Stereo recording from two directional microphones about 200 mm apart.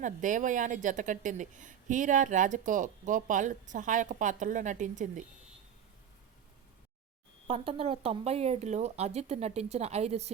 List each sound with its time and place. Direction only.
0.0 s a woman's voice: 40° right (ahead or behind)
7.4 s a woman's voice: 25° right (ahead or behind)